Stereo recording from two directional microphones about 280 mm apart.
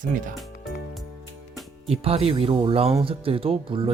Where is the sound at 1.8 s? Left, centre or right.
Right.